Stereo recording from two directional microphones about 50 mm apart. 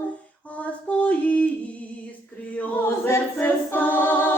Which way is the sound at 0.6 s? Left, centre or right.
Left.